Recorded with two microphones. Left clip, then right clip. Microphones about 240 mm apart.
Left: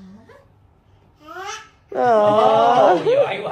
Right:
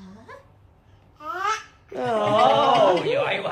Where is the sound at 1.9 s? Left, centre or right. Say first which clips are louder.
Left 9 dB; left.